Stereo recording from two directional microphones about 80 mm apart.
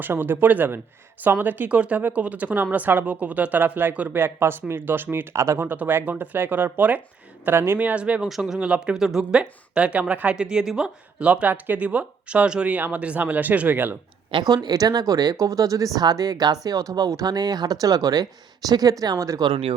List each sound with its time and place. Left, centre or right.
0.0 s speech: right
5.3 s speech: right
5.6 s speech: right
7.4 s speech: right
7.8 s speech: centre
8.3 s speech: centre; by 13.9 s right
14.3 s speech: right
14.5 s speech: right